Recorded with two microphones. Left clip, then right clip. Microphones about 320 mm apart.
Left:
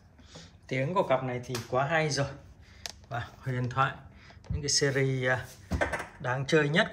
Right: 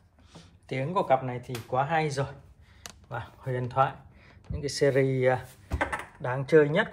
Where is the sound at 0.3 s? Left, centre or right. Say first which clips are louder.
Left 1 dB; centre.